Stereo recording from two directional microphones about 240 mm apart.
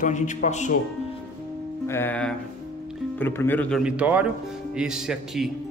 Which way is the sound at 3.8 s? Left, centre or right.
Centre.